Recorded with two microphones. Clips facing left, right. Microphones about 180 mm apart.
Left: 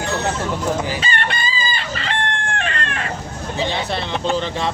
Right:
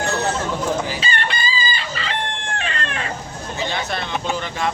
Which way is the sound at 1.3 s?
50° left (ahead or behind).